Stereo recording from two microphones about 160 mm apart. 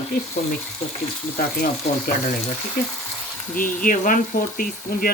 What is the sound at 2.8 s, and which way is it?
Speech, 70° left (ahead or behind).